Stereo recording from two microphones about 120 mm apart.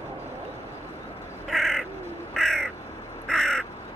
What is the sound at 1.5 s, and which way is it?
Bird, 5° left (ahead or behind).